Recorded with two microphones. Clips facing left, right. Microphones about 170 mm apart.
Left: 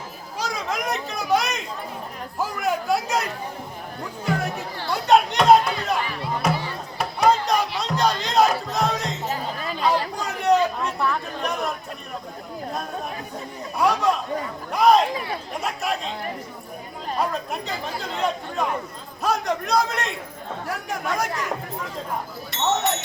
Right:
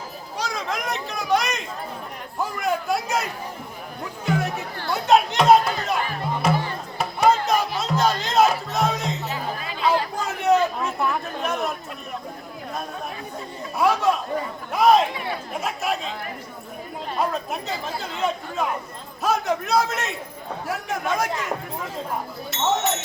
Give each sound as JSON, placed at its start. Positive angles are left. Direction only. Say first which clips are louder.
{"t": 0.3, "sound": "a sound", "louder": "left 1 dB", "side_deg": 0}
{"t": 2.4, "sound": "a man's voice", "louder": "even", "side_deg": 0}
{"t": 4.3, "sound": "music", "louder": "right 1 dB", "side_deg": 0}
{"t": 4.9, "sound": "a sound", "louder": "even", "side_deg": 0}
{"t": 6.0, "sound": "music", "louder": "right 1 dB", "side_deg": -45}
{"t": 7.0, "sound": "chatter", "louder": "even", "side_deg": 0}
{"t": 7.8, "sound": "music", "louder": "right 1 dB", "side_deg": 0}
{"t": 9.3, "sound": "music", "louder": "left 1 dB", "side_deg": 45}
{"t": 9.8, "sound": "a sound", "louder": "right 1 dB", "side_deg": 0}
{"t": 11.3, "sound": "chatter", "louder": "right 1 dB", "side_deg": 0}
{"t": 13.7, "sound": "a sound", "louder": "even", "side_deg": 0}
{"t": 15.6, "sound": "speech", "louder": "right 1 dB", "side_deg": 0}
{"t": 17.2, "sound": "a man's voice", "louder": "right 1 dB", "side_deg": 0}
{"t": 22.5, "sound": "speech", "louder": "even", "side_deg": 0}